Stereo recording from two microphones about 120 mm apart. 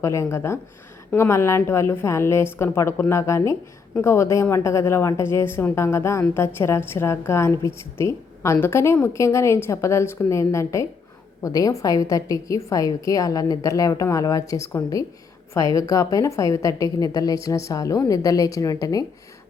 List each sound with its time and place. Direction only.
0.0 s a woman's voice: 25° left (ahead or behind)